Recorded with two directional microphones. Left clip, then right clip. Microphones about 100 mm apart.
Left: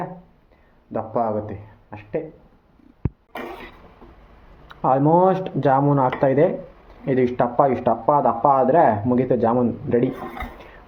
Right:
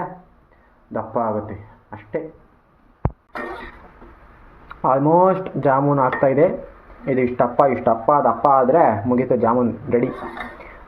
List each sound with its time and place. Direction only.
0.9 s speech: 5° left (ahead or behind)
4.7 s speech: 20° left (ahead or behind)